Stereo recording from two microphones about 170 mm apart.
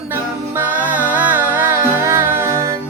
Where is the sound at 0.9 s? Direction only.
10° right (ahead or behind).